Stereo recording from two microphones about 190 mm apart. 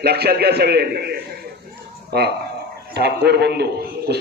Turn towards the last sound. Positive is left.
turn(degrees=-60)  # may be behind; listen again after turning